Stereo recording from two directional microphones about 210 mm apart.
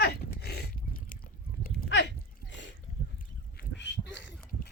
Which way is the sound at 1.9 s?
60° left (ahead or behind).